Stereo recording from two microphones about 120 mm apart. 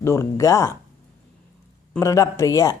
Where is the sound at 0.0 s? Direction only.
25° left (ahead or behind).